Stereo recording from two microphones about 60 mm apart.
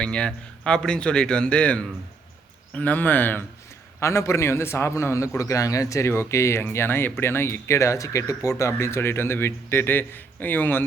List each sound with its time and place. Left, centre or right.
0.0 s a man's voice: centre; by 3.4 s left
4.0 s speech: left
5.4 s speech: left
6.7 s a man's voice: left